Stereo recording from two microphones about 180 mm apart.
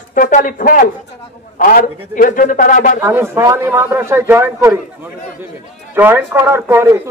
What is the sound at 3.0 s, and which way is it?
A man's voice, 10° right (ahead or behind).